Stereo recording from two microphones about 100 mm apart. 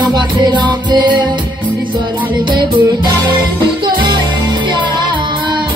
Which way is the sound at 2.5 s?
50° right (ahead or behind).